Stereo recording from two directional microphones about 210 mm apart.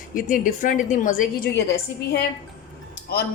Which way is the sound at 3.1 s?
50° left (ahead or behind).